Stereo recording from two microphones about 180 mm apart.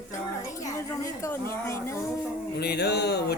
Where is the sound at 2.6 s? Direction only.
65° left (ahead or behind).